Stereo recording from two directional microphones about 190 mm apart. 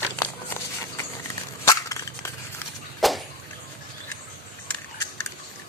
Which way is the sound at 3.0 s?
Centre (ahead or behind).